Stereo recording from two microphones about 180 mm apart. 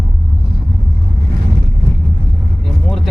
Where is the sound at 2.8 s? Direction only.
Centre (ahead or behind).